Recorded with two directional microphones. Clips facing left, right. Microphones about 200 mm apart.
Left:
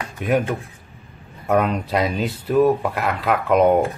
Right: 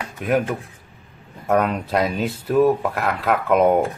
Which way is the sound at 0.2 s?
Centre (ahead or behind).